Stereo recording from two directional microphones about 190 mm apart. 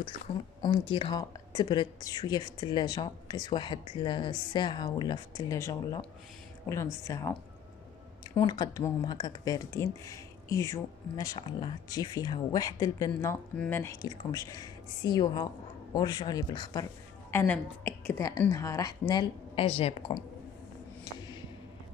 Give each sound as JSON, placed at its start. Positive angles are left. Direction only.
{"t": 0.6, "sound": "a woman's voice", "side_deg": 25}
{"t": 8.4, "sound": "speech", "side_deg": 20}
{"t": 17.3, "sound": "a woman's voice", "side_deg": 10}
{"t": 21.0, "sound": "a sound", "side_deg": 25}